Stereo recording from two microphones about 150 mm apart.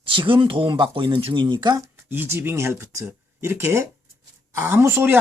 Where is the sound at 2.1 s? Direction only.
15° right (ahead or behind).